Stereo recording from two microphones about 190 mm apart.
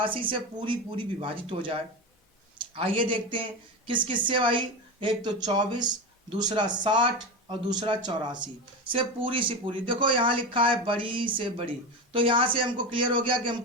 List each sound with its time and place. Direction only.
0.0 s speech: 25° right (ahead or behind)